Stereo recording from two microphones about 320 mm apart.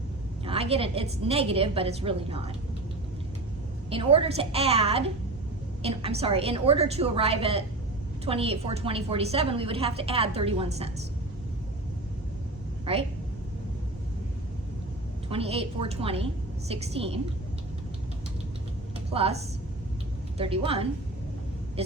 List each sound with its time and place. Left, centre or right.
0.4 s a woman's voice: centre
3.8 s a woman's voice: centre
12.8 s speech: centre
15.3 s a woman's voice: centre
19.1 s a woman's voice: centre